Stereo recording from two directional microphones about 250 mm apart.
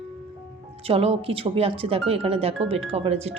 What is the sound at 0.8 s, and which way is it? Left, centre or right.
Speech, right.